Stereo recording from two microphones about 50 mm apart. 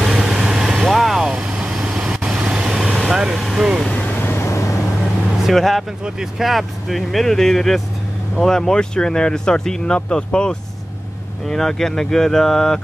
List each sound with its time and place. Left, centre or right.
0.0 s vehicle: centre
2.2 s vehicle: right; by 3.7 s centre
4.0 s vehicle: left
4.3 s vehicle: left
5.5 s speech: centre